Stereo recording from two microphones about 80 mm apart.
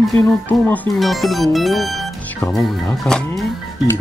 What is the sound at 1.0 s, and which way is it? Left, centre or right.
Speech, centre.